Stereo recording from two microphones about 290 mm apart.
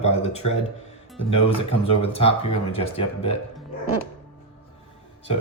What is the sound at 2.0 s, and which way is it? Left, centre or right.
Speech, centre.